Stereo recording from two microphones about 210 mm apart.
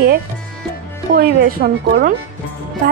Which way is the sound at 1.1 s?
45° right (ahead or behind).